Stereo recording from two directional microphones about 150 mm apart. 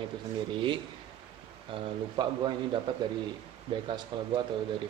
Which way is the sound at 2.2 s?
30° right (ahead or behind).